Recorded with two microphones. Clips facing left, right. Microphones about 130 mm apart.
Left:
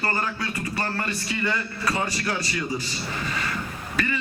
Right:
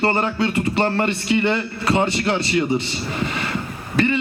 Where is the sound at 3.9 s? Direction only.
25° right (ahead or behind).